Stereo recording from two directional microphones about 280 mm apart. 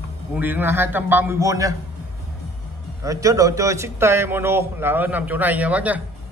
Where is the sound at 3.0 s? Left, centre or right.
Centre.